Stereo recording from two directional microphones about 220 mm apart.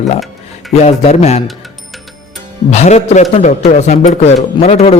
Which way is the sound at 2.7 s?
30° left (ahead or behind).